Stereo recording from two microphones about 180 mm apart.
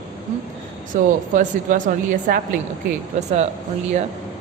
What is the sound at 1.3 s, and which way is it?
Speech, 45° right (ahead or behind).